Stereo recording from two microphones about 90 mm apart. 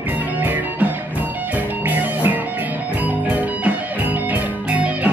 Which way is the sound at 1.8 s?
20° right (ahead or behind).